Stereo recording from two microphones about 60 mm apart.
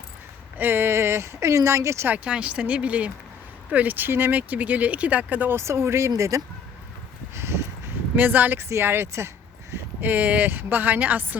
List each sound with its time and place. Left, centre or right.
0.6 s speech: right
2.0 s speech: right
5.5 s speech: right
7.3 s a sound: right
8.1 s speech: right
8.5 s speech: right
10.0 s speech: right